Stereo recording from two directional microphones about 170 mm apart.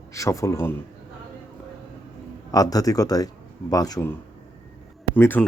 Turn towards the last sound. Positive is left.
turn(degrees=10)  # may be behind; listen again after turning